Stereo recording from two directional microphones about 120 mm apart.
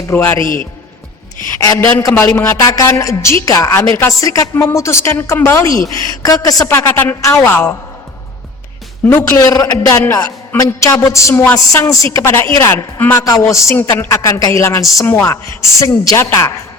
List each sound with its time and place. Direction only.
0.2 s a woman's voice: 25° left (ahead or behind)
1.5 s a woman's voice: 25° left (ahead or behind)
9.0 s a woman's voice: 25° left (ahead or behind)